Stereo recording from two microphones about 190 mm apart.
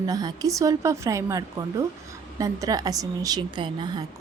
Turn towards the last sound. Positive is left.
turn(degrees=-20)  # may be behind; listen again after turning